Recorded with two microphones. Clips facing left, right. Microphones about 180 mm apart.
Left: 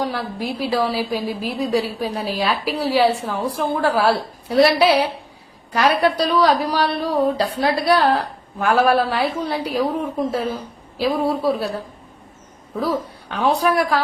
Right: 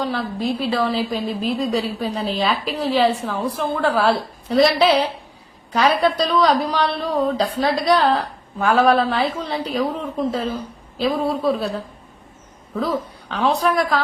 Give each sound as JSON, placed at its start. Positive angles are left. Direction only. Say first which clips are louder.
{"t": 0.0, "sound": "a woman's voice", "louder": "right 1 dB", "side_deg": 10}
{"t": 12.8, "sound": "a woman's voice", "louder": "left 1 dB", "side_deg": 10}